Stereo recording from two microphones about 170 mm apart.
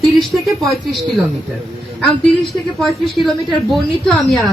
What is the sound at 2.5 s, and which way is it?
A woman's voice, centre (ahead or behind).